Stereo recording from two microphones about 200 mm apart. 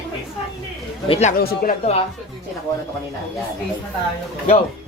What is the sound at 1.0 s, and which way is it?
Speech, 30° left (ahead or behind).